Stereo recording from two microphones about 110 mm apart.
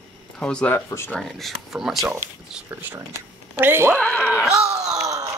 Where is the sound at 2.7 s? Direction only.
15° right (ahead or behind).